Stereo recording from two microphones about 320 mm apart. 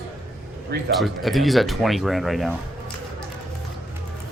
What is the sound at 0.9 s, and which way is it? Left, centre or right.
Speech, centre.